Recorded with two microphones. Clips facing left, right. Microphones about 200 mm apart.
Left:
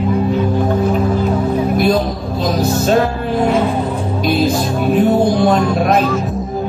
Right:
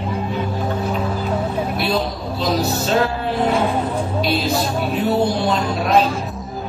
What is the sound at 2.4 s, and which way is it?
Speech, 50° left (ahead or behind).